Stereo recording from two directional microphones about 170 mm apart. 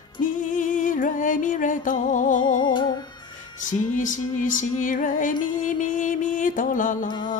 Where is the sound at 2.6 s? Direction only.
25° left (ahead or behind).